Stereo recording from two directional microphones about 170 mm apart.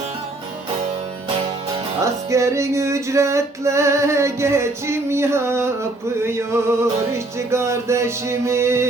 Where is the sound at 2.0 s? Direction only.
20° right (ahead or behind).